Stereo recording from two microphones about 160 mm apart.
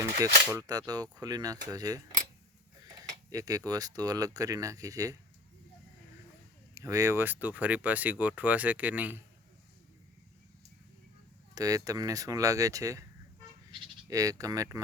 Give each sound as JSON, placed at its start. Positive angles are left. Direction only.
{"t": 0.5, "sound": "speech", "side_deg": -25}
{"t": 3.0, "sound": "a sound", "side_deg": -20}
{"t": 3.7, "sound": "speech", "side_deg": -25}
{"t": 6.7, "sound": "speech", "side_deg": -20}
{"t": 11.5, "sound": "speech", "side_deg": -20}
{"t": 14.1, "sound": "speech", "side_deg": -20}